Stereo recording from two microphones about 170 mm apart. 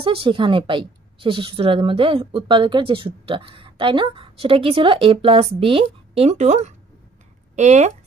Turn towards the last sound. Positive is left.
turn(degrees=-40)  # may be behind; listen again after turning